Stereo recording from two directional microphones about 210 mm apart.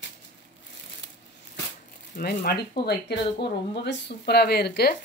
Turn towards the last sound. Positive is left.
turn(degrees=50)  # may be behind; listen again after turning